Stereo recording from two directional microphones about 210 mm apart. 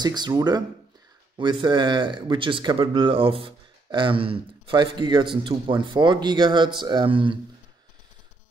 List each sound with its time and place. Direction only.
0.0 s speech: 20° right (ahead or behind)